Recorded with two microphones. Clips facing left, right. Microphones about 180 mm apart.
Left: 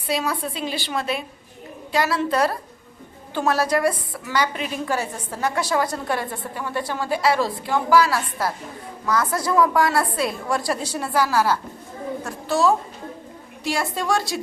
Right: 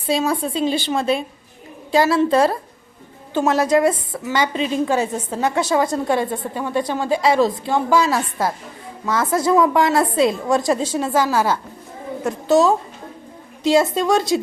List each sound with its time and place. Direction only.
0.1 s a woman's voice: 25° right (ahead or behind)